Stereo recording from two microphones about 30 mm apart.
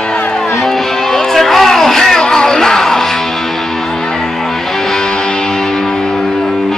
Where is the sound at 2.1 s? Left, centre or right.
Centre.